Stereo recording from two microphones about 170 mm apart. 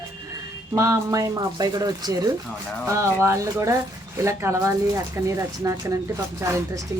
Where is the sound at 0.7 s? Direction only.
20° right (ahead or behind).